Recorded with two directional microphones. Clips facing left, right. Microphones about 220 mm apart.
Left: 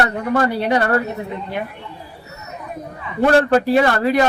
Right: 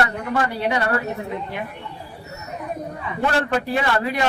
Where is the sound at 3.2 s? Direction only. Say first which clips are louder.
Left 8 dB; 40° left (ahead or behind).